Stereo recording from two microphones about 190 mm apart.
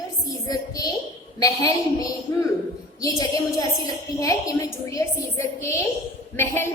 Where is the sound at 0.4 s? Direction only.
20° left (ahead or behind).